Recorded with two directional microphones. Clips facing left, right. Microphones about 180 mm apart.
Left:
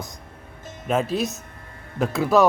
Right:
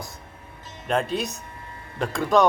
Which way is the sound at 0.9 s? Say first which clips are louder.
Left 2 dB; 5° left (ahead or behind).